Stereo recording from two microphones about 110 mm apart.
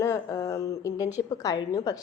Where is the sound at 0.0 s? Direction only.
25° left (ahead or behind).